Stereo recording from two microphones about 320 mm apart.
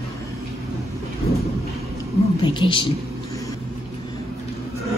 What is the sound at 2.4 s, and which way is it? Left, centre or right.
Speech, centre.